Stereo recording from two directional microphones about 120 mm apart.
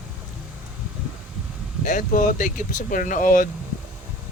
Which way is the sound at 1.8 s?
90° left.